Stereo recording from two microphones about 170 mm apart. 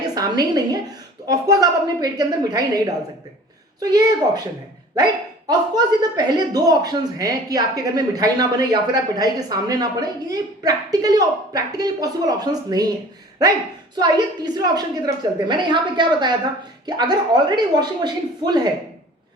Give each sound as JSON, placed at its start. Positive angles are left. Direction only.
{"t": 0.1, "sound": "a man's voice", "side_deg": -20}
{"t": 5.5, "sound": "a man's voice", "side_deg": -25}
{"t": 13.9, "sound": "a man's voice", "side_deg": -25}